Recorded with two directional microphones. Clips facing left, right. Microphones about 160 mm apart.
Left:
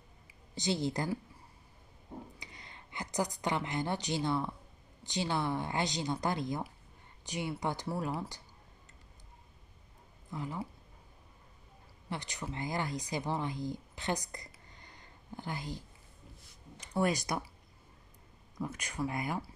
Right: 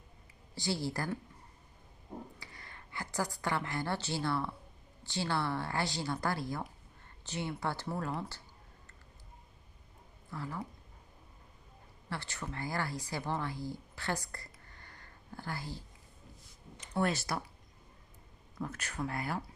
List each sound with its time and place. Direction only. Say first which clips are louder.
0.6 s speech: left 3 dB; 20° left (ahead or behind)
2.4 s a woman's voice: even; 20° left (ahead or behind)
10.3 s a woman's voice: left 2 dB; 15° left (ahead or behind)
12.1 s speech: left 1 dB; 15° left (ahead or behind)
17.0 s a woman's voice: left 2 dB; 15° left (ahead or behind)
18.6 s a woman's voice: left 2 dB; 15° left (ahead or behind)